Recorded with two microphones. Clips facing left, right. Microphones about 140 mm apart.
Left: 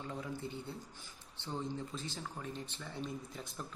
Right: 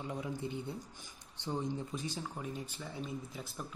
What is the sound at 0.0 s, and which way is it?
Speech, 15° right (ahead or behind).